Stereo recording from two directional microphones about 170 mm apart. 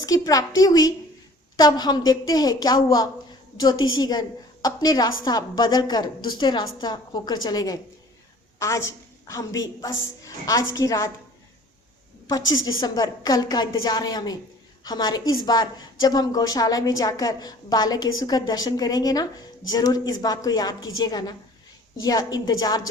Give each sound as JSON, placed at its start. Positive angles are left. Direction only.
{"t": 0.0, "sound": "a woman's voice", "side_deg": 20}
{"t": 12.5, "sound": "a woman's voice", "side_deg": 20}